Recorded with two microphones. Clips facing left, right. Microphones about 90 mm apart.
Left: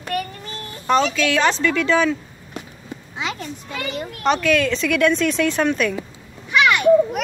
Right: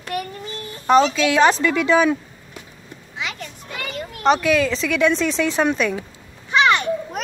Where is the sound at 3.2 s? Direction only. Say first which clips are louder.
Left 2 dB; 30° left (ahead or behind).